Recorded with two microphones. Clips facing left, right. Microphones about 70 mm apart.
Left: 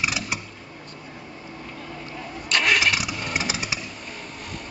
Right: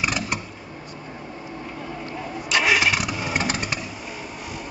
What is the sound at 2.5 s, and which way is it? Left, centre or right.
Engine starting, centre.